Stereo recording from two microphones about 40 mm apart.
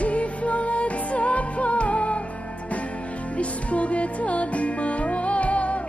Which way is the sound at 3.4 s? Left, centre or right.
Left.